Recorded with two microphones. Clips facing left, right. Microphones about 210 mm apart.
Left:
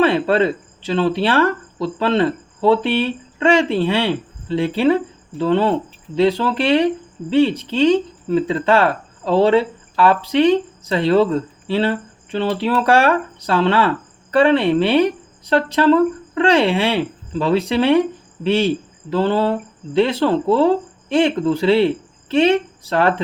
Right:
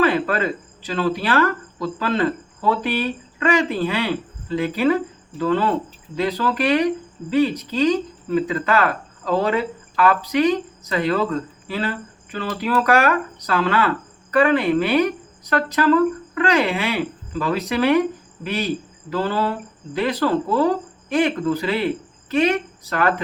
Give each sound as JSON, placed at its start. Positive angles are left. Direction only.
{"t": 0.0, "sound": "speech", "side_deg": 30}